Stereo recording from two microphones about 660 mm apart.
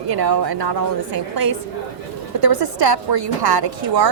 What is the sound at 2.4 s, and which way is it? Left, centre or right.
A woman's voice, right.